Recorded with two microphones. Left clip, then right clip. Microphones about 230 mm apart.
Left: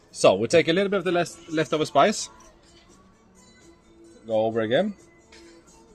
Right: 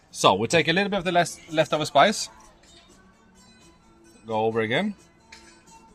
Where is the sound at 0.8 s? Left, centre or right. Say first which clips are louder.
Left 1 dB; right.